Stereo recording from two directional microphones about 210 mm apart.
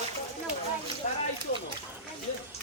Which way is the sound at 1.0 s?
35° left (ahead or behind).